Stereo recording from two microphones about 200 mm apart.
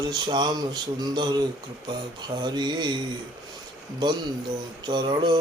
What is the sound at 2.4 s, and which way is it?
Mantra, 20° right (ahead or behind).